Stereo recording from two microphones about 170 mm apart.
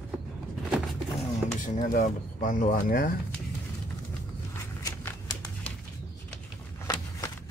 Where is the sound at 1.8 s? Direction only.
50° left (ahead or behind).